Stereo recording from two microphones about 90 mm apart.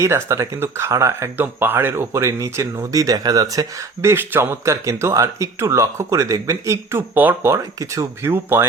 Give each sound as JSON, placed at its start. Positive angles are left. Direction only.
{"t": 0.0, "sound": "speech", "side_deg": -35}
{"t": 4.0, "sound": "speech", "side_deg": -25}
{"t": 7.5, "sound": "speech", "side_deg": -40}
{"t": 8.2, "sound": "speech", "side_deg": -30}